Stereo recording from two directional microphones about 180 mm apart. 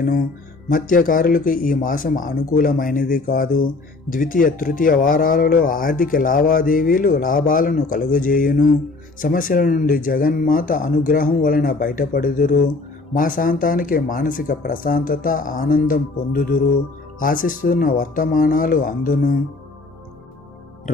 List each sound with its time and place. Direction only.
0.7 s speech: 50° left (ahead or behind)